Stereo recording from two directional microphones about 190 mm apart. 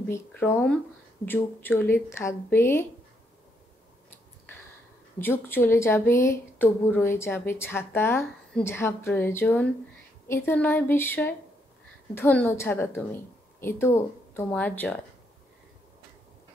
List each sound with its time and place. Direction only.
0.1 s speech: 10° left (ahead or behind)
5.2 s speech: 10° left (ahead or behind)